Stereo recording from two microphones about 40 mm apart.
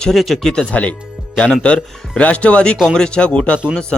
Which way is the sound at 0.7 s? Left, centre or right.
Left.